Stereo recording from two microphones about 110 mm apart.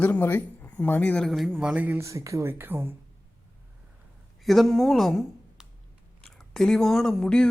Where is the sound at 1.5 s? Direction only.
15° right (ahead or behind).